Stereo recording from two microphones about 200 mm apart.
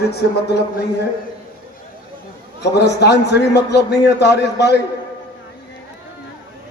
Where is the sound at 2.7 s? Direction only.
55° left (ahead or behind).